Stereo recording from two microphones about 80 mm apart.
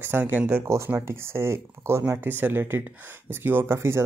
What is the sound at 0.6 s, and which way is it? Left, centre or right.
Speech, right.